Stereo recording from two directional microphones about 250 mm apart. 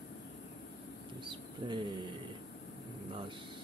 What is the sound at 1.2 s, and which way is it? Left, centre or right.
Speech, centre.